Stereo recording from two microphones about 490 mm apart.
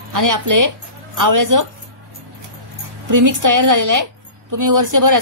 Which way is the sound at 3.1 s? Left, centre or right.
Right.